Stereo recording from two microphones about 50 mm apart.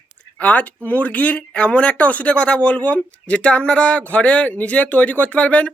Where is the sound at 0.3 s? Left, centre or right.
Left.